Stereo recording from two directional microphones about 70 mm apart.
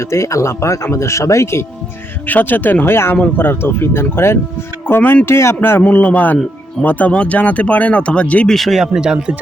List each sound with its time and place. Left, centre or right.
0.0 s speech: left
2.2 s speech: left
8.4 s speech: centre